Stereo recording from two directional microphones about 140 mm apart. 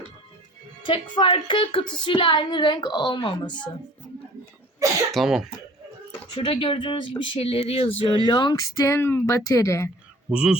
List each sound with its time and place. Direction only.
0.8 s a woman's voice: 35° left (ahead or behind)
5.1 s speech: centre (ahead or behind)
6.3 s a woman's voice: 40° left (ahead or behind)
8.0 s speech: 35° left (ahead or behind)
10.3 s speech: 5° right (ahead or behind)